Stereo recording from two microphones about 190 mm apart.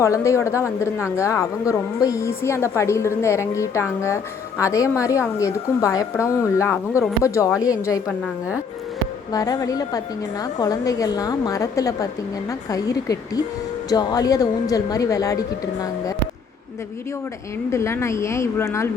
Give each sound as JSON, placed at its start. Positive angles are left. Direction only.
{"t": 0.0, "sound": "a woman's voice", "side_deg": 15}
{"t": 8.0, "sound": "a woman's voice", "side_deg": -5}
{"t": 9.3, "sound": "a woman's voice", "side_deg": 20}
{"t": 17.7, "sound": "a woman's voice", "side_deg": 15}